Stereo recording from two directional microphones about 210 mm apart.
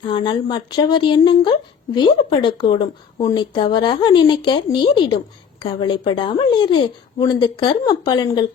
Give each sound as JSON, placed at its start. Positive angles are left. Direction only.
{"t": 0.1, "sound": "a woman's voice", "side_deg": 20}